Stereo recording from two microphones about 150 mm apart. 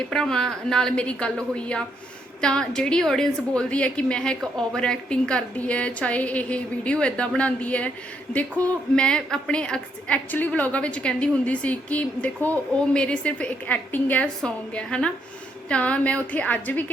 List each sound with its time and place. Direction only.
0.1 s a woman's voice: 5° left (ahead or behind)